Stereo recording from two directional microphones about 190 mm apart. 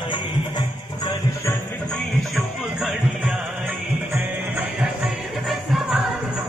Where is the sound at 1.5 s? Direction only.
5° left (ahead or behind).